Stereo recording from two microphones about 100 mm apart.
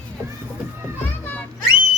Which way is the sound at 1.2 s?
15° left (ahead or behind).